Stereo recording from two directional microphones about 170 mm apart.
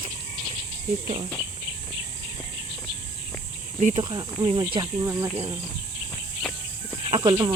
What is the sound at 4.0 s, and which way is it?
Speech, 30° right (ahead or behind).